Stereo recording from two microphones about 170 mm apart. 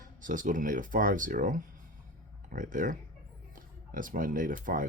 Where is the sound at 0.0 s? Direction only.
50° right (ahead or behind).